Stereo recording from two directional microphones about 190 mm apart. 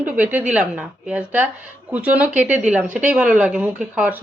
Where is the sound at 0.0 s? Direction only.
10° right (ahead or behind).